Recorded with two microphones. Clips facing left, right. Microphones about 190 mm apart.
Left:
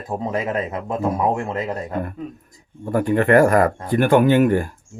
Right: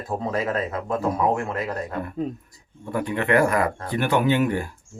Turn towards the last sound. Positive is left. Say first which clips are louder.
# left 6 dB
turn(degrees=50)  # may be behind; listen again after turning